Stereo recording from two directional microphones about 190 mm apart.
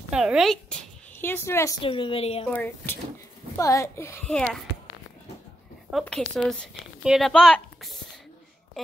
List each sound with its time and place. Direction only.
0.1 s speech: 5° right (ahead or behind); by 1.8 s 15° left (ahead or behind)
1.8 s a woman's voice: 25° left (ahead or behind)
2.5 s a child's voice: 10° left (ahead or behind)
5.9 s a woman's voice: centre (ahead or behind)